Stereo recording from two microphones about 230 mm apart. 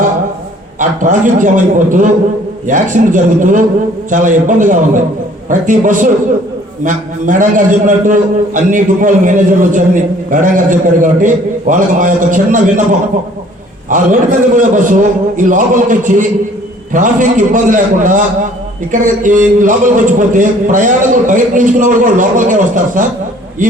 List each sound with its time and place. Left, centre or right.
0.8 s a man's voice: right